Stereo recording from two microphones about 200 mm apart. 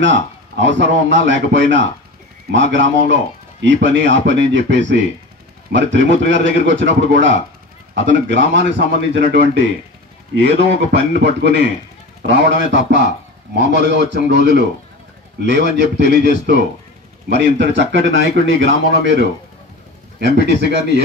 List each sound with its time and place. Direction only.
0.0 s a man's voice: 65° right (ahead or behind)
12.7 s a man's voice: 60° right (ahead or behind)